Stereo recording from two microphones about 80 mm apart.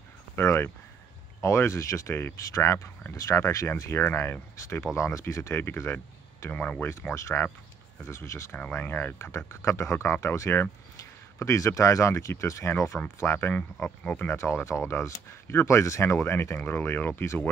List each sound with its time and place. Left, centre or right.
0.4 s speech: left
3.9 s speech: left
6.5 s speech: centre
7.2 s speech: left
8.5 s speech: centre
9.3 s speech: left
13.6 s speech: centre
14.3 s speech: left